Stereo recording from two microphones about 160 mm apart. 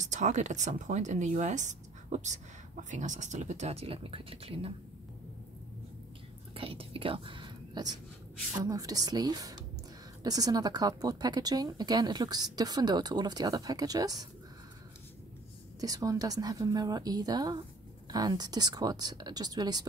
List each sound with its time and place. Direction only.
0.0 s speech: 50° right (ahead or behind)
6.5 s whispering: 35° right (ahead or behind)
8.6 s speech: 20° right (ahead or behind)
15.8 s speech: 20° right (ahead or behind)